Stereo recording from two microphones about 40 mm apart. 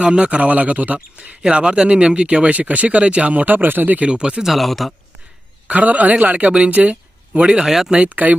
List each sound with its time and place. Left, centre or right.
0.0 s speech: right
1.4 s speech: right
2.6 s speech: right
4.0 s speech: right
4.4 s speech: centre
5.6 s speech: right
7.3 s speech: right
8.1 s speech: right